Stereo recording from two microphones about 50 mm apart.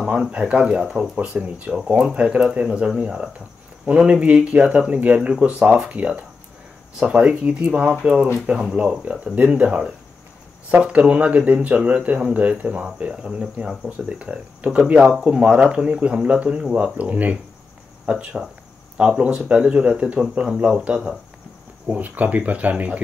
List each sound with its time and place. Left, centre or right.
0.0 s speech: centre
13.8 s speech: right
21.8 s speech: right